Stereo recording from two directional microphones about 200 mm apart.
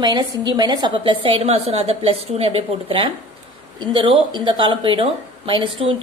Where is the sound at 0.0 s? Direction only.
20° right (ahead or behind).